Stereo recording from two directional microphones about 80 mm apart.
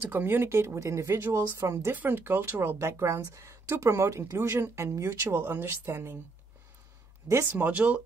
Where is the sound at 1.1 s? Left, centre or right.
Right.